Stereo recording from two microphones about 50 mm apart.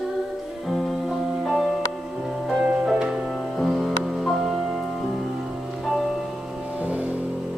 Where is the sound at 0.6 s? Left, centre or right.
Centre.